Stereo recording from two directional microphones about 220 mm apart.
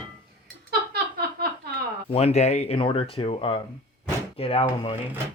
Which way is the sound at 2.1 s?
25° left (ahead or behind).